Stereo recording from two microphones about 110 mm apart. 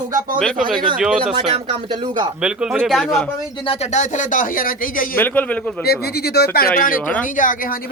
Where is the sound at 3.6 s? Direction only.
70° left (ahead or behind); by 4.1 s 90° left.